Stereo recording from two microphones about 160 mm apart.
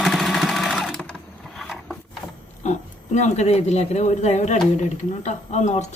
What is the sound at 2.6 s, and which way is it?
Oink, 45° left (ahead or behind).